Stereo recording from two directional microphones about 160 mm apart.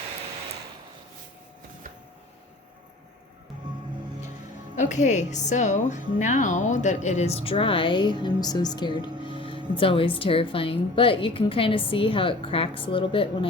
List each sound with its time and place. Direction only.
4.8 s a woman's voice: 50° left (ahead or behind)